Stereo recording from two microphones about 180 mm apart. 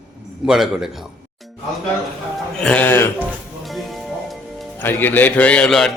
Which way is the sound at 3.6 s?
Centre (ahead or behind).